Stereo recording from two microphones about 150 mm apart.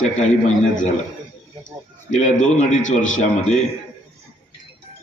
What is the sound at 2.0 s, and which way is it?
A man's voice, 55° left (ahead or behind).